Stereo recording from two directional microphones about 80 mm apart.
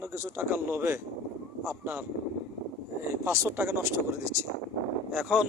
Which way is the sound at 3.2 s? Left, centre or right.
Right.